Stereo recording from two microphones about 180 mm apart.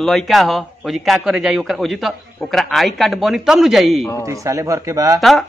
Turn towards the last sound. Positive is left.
turn(degrees=0)  # may be behind; listen again after turning